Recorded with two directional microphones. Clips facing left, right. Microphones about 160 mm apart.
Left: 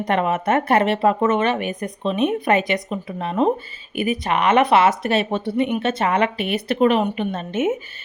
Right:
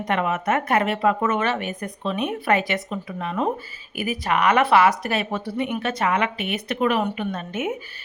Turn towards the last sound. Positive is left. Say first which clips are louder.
# left 5 dB
turn(degrees=25)  # may be behind; listen again after turning